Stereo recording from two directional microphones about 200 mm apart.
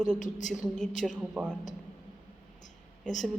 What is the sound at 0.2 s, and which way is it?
Speech, 40° left (ahead or behind).